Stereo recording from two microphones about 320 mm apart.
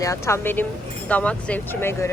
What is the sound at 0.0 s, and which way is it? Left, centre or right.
Speech, centre.